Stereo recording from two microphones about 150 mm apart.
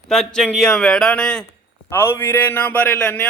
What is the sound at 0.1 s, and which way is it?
A man's voice, 5° left (ahead or behind).